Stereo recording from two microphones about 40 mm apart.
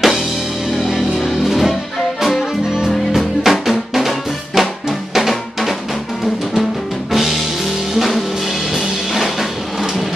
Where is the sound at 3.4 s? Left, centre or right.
Centre.